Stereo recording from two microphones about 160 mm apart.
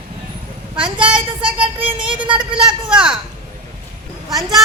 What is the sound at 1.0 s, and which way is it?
Child singing, 5° right (ahead or behind).